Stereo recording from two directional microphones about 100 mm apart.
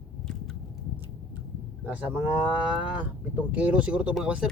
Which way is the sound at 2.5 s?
10° right (ahead or behind).